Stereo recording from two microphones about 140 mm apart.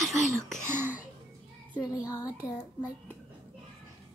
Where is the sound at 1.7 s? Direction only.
25° left (ahead or behind).